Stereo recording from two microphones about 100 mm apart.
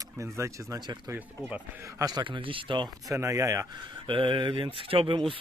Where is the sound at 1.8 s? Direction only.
35° right (ahead or behind).